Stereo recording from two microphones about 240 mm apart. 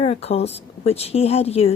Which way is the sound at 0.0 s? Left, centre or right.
Left.